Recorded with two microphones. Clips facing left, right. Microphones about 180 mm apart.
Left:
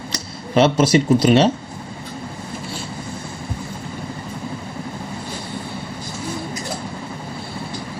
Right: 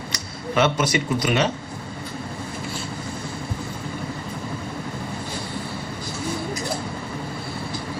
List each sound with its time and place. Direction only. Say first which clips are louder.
0.1 s speech: left 6 dB; 30° left (ahead or behind)